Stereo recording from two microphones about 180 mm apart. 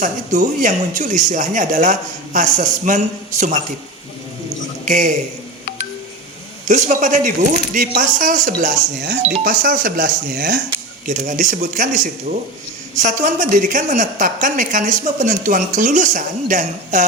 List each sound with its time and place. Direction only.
0.0 s a woman's voice: 45° right (ahead or behind)
4.9 s a woman's voice: 45° right (ahead or behind)
6.7 s a woman's voice: 45° right (ahead or behind)
11.0 s a woman's voice: 45° right (ahead or behind)
13.0 s a woman's voice: 45° right (ahead or behind)